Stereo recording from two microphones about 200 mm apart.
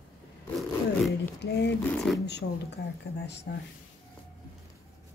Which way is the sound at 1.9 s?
5° left (ahead or behind).